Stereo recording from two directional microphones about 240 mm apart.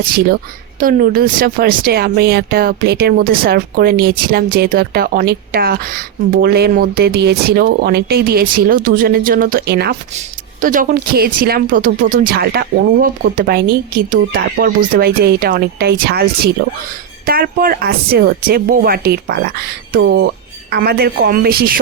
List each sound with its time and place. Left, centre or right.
0.8 s speech: right